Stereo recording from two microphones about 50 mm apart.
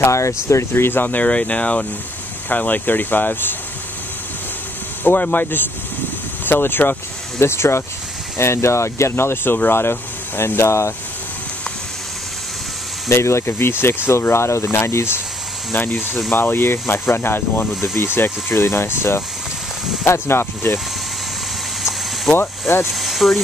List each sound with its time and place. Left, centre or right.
0.0 s speech: left
0.5 s speech: left
0.8 s speech: left
1.1 s speech: left
5.0 s speech: left
7.3 s speech: left
13.1 s speech: left
14.1 s speech: left
15.7 s speech: left
22.4 s speech: left
22.8 s speech: centre